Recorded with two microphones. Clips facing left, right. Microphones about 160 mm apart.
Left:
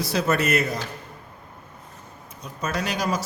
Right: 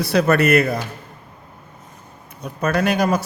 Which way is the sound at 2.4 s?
60° right (ahead or behind).